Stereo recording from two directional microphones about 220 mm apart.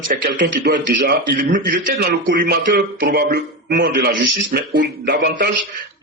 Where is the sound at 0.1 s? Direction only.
45° right (ahead or behind).